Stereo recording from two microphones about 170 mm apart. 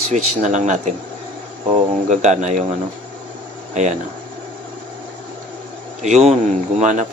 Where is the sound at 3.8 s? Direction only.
45° right (ahead or behind).